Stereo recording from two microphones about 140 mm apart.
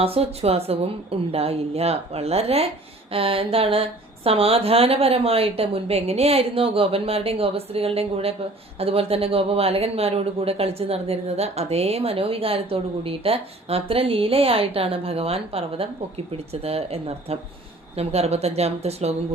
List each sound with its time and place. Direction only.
0.0 s speech: 45° right (ahead or behind)